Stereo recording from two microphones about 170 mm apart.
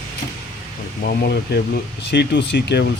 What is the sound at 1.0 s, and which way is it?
Speech, 65° left (ahead or behind).